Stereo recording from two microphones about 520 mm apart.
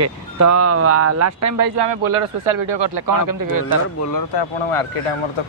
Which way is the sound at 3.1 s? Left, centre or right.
Right.